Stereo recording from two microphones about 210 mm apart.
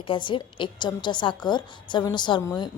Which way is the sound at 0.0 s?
25° left (ahead or behind).